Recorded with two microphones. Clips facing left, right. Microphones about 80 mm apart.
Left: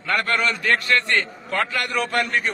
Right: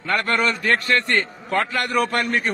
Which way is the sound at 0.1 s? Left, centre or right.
Right.